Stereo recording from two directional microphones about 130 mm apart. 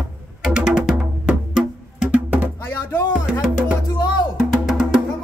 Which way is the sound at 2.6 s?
20° left (ahead or behind).